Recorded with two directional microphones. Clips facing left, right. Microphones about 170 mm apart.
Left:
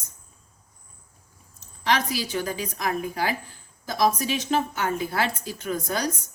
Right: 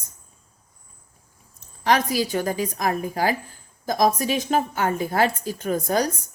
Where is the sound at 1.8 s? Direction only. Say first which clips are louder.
Right 4 dB; 45° right (ahead or behind).